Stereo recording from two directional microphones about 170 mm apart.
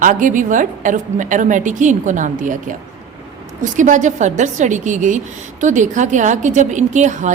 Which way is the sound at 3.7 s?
50° right (ahead or behind).